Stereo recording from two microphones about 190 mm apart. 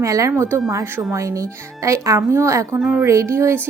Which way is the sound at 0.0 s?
15° right (ahead or behind).